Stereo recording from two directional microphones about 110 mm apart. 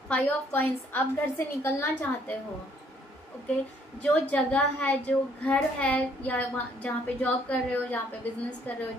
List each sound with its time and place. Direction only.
0.1 s a woman's voice: 15° left (ahead or behind)
4.0 s a woman's voice: 10° left (ahead or behind)